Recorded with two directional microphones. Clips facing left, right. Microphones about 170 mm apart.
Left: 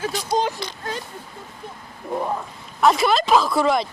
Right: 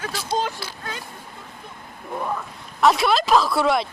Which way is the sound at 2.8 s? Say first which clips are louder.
Left 1 dB; centre (ahead or behind).